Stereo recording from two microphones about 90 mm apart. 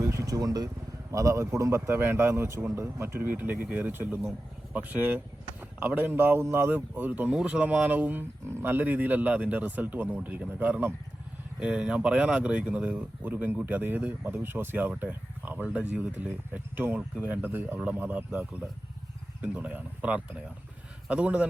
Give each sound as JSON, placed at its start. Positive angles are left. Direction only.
{"t": 0.0, "sound": "a sound", "side_deg": -30}
{"t": 1.1, "sound": "speech", "side_deg": -35}
{"t": 11.6, "sound": "speech", "side_deg": -10}